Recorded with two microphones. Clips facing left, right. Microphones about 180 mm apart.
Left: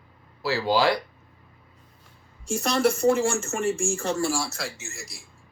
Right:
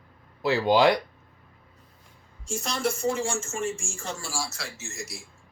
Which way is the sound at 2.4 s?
60° left (ahead or behind).